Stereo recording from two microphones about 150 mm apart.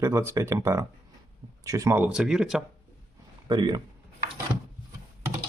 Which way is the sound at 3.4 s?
30° right (ahead or behind).